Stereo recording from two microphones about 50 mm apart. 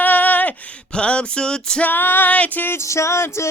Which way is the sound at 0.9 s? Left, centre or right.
Left.